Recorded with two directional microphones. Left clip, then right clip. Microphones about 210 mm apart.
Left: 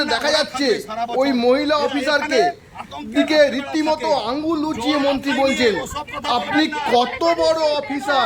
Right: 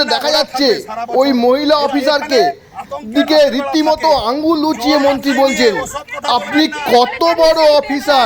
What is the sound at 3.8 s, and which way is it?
Speech, centre (ahead or behind).